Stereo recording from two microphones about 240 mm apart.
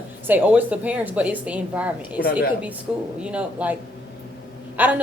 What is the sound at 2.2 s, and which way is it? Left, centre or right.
Speech, left.